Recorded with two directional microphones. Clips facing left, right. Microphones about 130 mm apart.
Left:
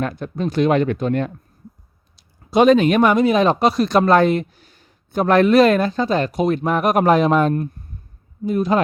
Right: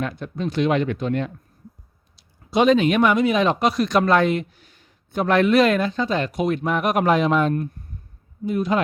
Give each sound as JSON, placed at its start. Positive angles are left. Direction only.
{"t": 0.0, "sound": "speech", "side_deg": 45}